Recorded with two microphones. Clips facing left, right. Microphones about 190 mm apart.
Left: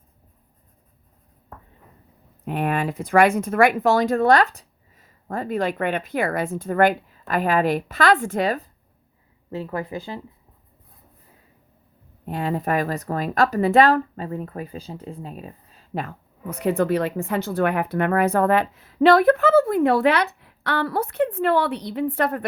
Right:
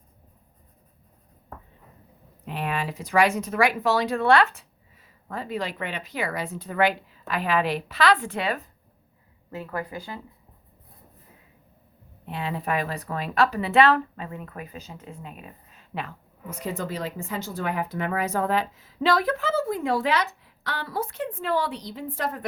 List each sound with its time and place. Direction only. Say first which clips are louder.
2.4 s speech: left 6 dB; 50° left (ahead or behind)
9.5 s speech: left 4 dB; 25° left (ahead or behind)
12.2 s speech: left 6 dB; 45° left (ahead or behind)
16.5 s speech: left 10 dB; 60° left (ahead or behind)